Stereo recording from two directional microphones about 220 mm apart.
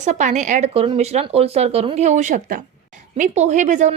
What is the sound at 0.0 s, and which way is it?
A woman's voice, 35° right (ahead or behind).